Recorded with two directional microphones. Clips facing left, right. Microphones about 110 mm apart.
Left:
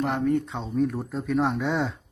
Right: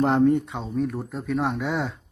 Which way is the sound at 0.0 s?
30° right (ahead or behind).